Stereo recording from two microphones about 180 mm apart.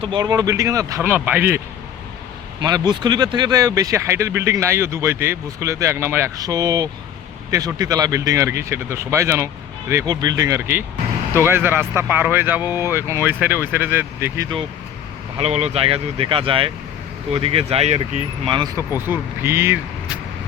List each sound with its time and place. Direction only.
0.0 s speech: 25° right (ahead or behind)
2.6 s speech: 20° right (ahead or behind)
15.4 s speech: 35° right (ahead or behind)
18.8 s speech: 10° right (ahead or behind)